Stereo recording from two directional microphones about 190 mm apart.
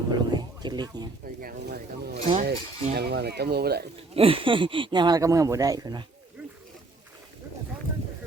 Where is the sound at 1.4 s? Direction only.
55° right (ahead or behind).